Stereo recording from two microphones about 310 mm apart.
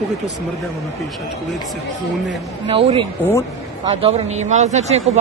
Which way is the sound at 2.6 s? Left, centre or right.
Centre.